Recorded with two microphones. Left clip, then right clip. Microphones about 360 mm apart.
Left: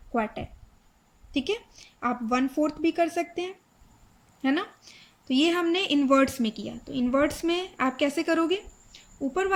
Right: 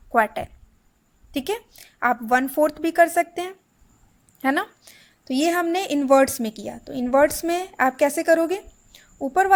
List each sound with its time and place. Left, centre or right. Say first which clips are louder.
0.4 s speech: right 8 dB; right
1.3 s a woman's voice: right 2 dB; centre